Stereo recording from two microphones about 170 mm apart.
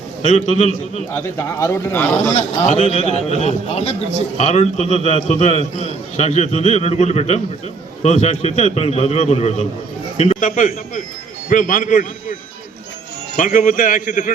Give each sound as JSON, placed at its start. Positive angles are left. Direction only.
{"t": 0.2, "sound": "a man's voice", "side_deg": 40}
{"t": 1.4, "sound": "a man's voice", "side_deg": 15}
{"t": 2.3, "sound": "a man's voice", "side_deg": 40}